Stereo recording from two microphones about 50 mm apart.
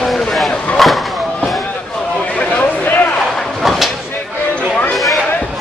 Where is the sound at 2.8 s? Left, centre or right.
Left.